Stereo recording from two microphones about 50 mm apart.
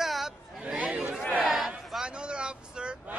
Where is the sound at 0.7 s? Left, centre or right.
Right.